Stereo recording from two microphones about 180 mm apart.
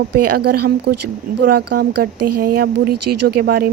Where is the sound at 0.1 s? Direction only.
60° right (ahead or behind).